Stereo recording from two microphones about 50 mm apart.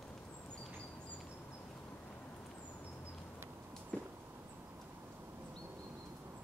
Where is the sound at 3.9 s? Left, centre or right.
Left.